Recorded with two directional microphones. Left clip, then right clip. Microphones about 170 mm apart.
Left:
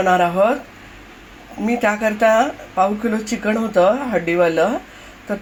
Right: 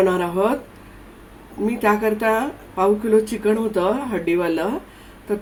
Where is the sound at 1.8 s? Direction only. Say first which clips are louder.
Left 2 dB; 30° left (ahead or behind).